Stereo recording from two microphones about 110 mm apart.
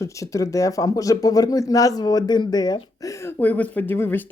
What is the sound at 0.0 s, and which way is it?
A woman's voice, 30° left (ahead or behind).